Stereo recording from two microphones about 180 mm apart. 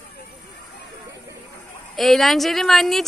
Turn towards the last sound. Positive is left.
turn(degrees=0)  # may be behind; listen again after turning